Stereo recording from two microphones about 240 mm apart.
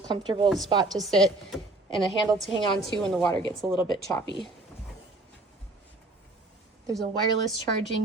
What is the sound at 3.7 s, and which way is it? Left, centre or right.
Speech, centre.